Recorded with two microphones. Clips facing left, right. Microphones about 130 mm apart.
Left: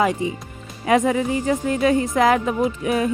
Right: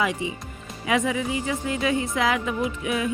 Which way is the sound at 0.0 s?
40° left (ahead or behind).